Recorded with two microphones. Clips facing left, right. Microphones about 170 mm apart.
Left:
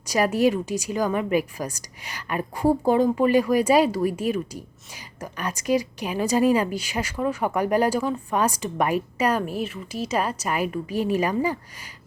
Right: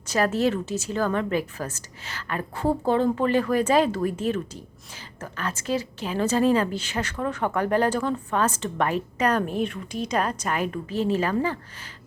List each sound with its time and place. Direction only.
0.0 s a woman's voice: 10° left (ahead or behind)